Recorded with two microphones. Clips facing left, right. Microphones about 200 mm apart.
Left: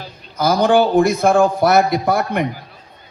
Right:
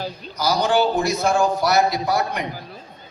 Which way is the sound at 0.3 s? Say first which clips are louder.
Left 5 dB; 55° left (ahead or behind).